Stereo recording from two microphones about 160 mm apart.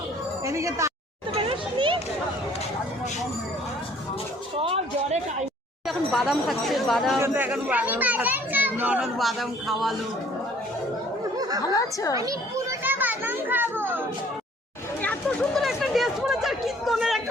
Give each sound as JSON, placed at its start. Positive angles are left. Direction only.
{"t": 0.4, "sound": "speech", "side_deg": -20}
{"t": 1.4, "sound": "children playing", "side_deg": -35}
{"t": 4.5, "sound": "a sound", "side_deg": -35}
{"t": 5.9, "sound": "speech", "side_deg": 0}
{"t": 7.2, "sound": "a child's voice", "side_deg": -10}
{"t": 11.7, "sound": "a woman's voice", "side_deg": 20}
{"t": 12.1, "sound": "a child's voice", "side_deg": -20}
{"t": 12.8, "sound": "children playing", "side_deg": -10}
{"t": 15.0, "sound": "chatter", "side_deg": 10}